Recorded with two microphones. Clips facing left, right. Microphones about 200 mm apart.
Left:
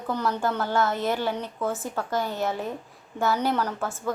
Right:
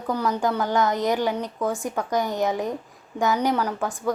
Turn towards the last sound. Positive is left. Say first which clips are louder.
# right 2 dB
turn(degrees=-15)  # may be behind; listen again after turning